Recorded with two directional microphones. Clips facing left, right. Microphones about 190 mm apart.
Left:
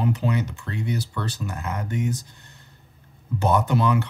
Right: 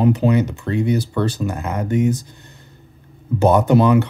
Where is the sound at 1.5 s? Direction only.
15° right (ahead or behind).